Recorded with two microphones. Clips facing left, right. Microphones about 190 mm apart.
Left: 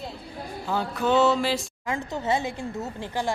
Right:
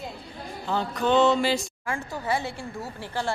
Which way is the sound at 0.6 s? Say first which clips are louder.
Even; 10° left (ahead or behind).